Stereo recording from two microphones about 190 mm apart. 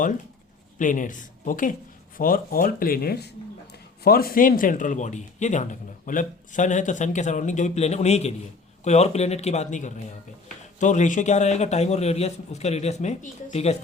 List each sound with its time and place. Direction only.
0.8 s a man's voice: 45° left (ahead or behind)